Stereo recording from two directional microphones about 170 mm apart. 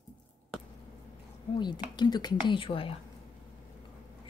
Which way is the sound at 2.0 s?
25° left (ahead or behind).